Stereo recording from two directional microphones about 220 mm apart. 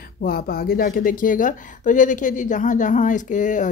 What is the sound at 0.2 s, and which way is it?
A woman's voice, 40° left (ahead or behind).